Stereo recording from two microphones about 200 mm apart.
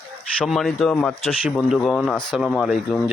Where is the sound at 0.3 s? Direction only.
Centre (ahead or behind).